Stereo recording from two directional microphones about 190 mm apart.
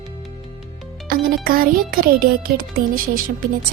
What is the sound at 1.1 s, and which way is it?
A child's voice, 50° right (ahead or behind).